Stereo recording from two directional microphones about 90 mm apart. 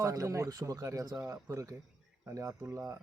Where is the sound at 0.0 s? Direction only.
40° right (ahead or behind).